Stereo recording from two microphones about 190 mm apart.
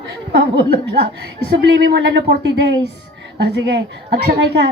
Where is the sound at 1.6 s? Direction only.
65° right (ahead or behind).